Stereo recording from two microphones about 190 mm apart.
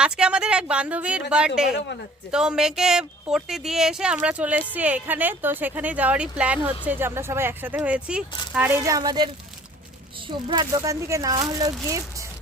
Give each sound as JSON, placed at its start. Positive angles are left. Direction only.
{"t": 0.0, "sound": "speech", "side_deg": -5}